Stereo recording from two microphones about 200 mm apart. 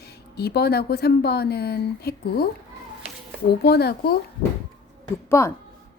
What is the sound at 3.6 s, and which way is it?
Speech, 55° left (ahead or behind).